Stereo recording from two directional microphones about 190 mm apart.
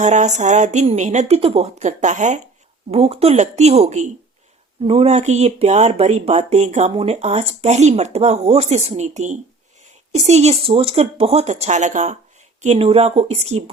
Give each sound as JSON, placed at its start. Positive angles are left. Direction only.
{"t": 0.0, "sound": "speech", "side_deg": -40}